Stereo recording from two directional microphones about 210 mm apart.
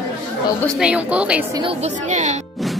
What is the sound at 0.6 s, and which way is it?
Speech, centre (ahead or behind).